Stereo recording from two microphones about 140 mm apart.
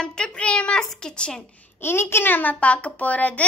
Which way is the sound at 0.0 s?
5° left (ahead or behind).